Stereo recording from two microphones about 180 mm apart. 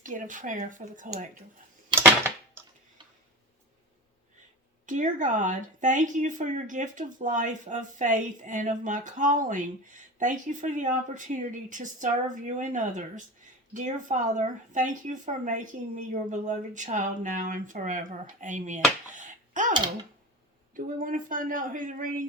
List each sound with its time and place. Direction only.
0.0 s speech: 45° right (ahead or behind)
4.9 s speech: 45° right (ahead or behind)
19.1 s a sound: 45° right (ahead or behind)
20.7 s speech: 50° right (ahead or behind)